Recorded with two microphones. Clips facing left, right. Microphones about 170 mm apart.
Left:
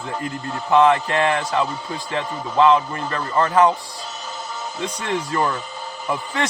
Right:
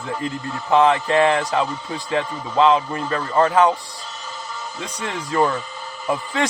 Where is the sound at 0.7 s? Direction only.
20° right (ahead or behind).